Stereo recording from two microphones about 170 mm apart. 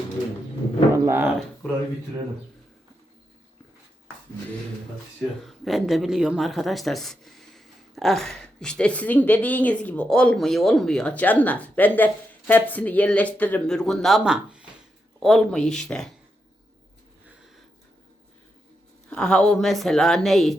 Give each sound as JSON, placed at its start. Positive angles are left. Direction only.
{"t": 0.9, "sound": "a sound", "side_deg": -15}
{"t": 5.5, "sound": "speech", "side_deg": 0}
{"t": 19.1, "sound": "speech", "side_deg": 5}